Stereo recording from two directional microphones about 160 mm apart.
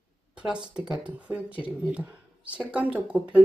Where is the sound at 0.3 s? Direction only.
5° right (ahead or behind).